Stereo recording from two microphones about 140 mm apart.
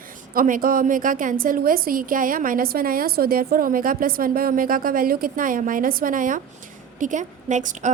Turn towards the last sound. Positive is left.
turn(degrees=-60)  # may be behind; listen again after turning